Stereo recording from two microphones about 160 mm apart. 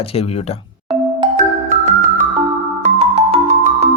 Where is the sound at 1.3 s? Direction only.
50° right (ahead or behind).